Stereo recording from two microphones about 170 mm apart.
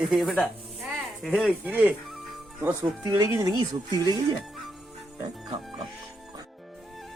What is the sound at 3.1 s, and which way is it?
Speech, 20° right (ahead or behind).